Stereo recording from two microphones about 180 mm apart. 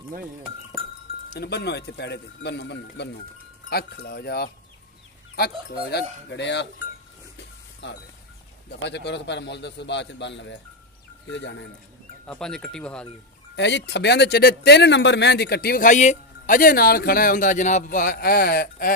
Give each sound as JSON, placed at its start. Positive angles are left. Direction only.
{"t": 1.4, "sound": "a man's voice", "side_deg": 70}
{"t": 3.7, "sound": "a man's voice", "side_deg": 60}
{"t": 7.8, "sound": "a man's voice", "side_deg": 80}
{"t": 12.3, "sound": "speech", "side_deg": 5}
{"t": 13.6, "sound": "speech", "side_deg": 75}